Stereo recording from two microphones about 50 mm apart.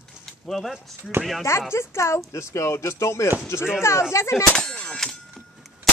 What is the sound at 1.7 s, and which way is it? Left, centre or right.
Speech, left.